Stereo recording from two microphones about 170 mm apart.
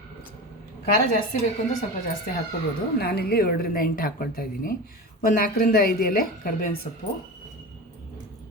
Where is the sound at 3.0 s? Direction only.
65° left (ahead or behind).